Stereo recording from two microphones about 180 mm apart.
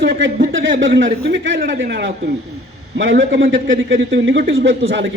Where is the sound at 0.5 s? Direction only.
90° right; by 2.3 s 75° right (ahead or behind).